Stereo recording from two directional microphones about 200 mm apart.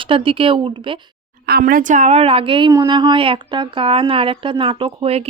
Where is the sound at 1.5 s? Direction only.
50° right (ahead or behind).